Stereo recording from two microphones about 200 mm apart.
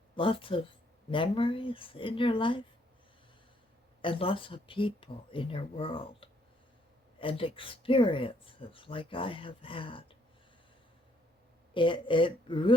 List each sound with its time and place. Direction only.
0.2 s speech: 25° left (ahead or behind)
4.0 s speech: 25° left (ahead or behind)
11.7 s speech: 25° left (ahead or behind)